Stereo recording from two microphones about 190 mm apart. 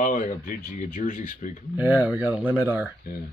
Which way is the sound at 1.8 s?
10° right (ahead or behind).